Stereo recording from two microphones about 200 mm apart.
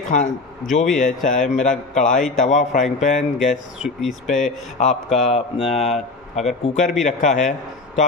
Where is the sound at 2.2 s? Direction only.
Centre (ahead or behind).